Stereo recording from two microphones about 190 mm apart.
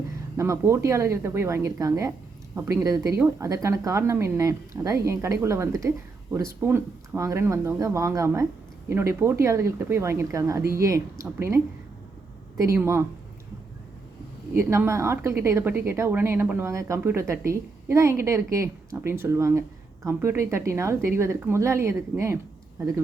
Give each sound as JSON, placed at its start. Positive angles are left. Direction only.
{"t": 0.3, "sound": "a woman's voice", "side_deg": -15}
{"t": 14.5, "sound": "a woman's voice", "side_deg": -15}